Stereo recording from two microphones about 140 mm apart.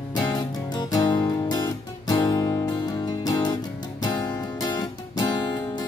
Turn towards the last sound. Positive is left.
turn(degrees=30)  # may be behind; listen again after turning